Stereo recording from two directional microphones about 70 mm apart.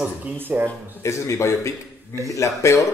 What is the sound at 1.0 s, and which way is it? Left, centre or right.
Speech, left.